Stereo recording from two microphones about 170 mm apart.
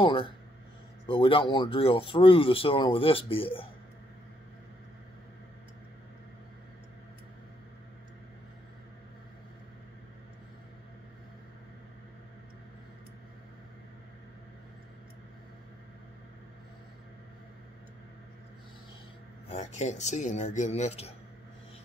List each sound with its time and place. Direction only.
0.0 s speech: 30° left (ahead or behind)
19.5 s speech: 45° left (ahead or behind)